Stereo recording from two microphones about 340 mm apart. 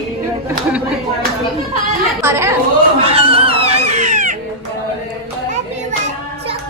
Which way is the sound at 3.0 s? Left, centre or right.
Centre.